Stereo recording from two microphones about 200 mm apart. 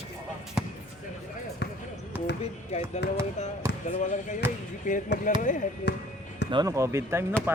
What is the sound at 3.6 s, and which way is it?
Basketball bounce, 15° right (ahead or behind).